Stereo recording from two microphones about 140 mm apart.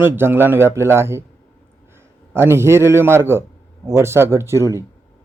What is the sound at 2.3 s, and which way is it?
Speech, 15° right (ahead or behind).